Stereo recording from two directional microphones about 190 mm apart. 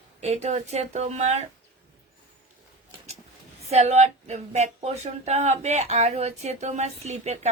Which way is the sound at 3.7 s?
35° right (ahead or behind).